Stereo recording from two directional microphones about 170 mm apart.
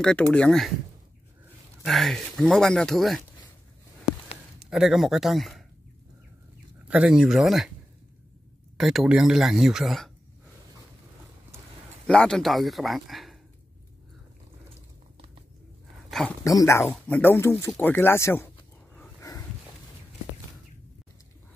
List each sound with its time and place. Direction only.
0.0 s speech: 5° left (ahead or behind)
1.9 s speech: centre (ahead or behind)
4.6 s speech: 5° right (ahead or behind)
6.9 s speech: 5° right (ahead or behind)
8.7 s speech: centre (ahead or behind)
12.1 s speech: 5° left (ahead or behind)
16.1 s speech: centre (ahead or behind)
16.4 s speech: 15° left (ahead or behind)